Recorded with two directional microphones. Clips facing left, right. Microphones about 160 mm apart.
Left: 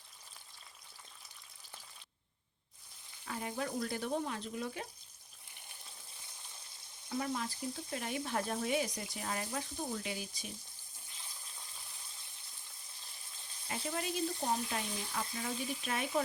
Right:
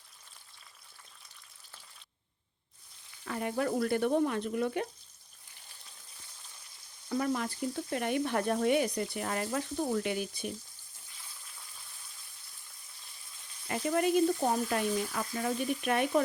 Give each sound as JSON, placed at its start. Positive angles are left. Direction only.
{"t": 3.2, "sound": "frying", "side_deg": -65}
{"t": 7.1, "sound": "frying", "side_deg": -60}
{"t": 11.1, "sound": "water", "side_deg": 20}
{"t": 13.7, "sound": "frying", "side_deg": -60}
{"t": 14.6, "sound": "speech", "side_deg": -55}
{"t": 15.1, "sound": "frying", "side_deg": -60}